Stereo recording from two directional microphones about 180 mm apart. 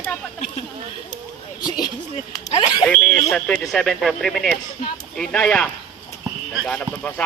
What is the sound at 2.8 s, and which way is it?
Speech, 5° left (ahead or behind).